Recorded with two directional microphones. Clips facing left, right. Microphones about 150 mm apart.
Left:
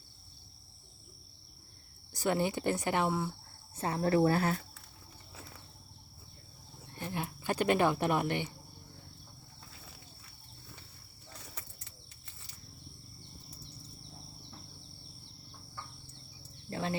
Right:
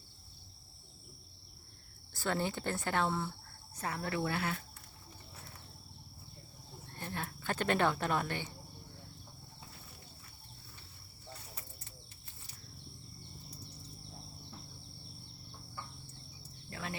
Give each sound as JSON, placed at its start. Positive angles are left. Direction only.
{"t": 2.1, "sound": "speech", "side_deg": 15}
{"t": 3.8, "sound": "speech", "side_deg": 30}
{"t": 6.9, "sound": "speech", "side_deg": 15}
{"t": 16.6, "sound": "a sound", "side_deg": 30}